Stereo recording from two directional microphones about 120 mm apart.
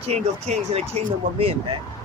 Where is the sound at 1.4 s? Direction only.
50° right (ahead or behind).